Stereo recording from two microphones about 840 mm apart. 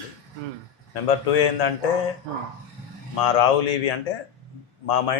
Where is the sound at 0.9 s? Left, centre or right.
Left.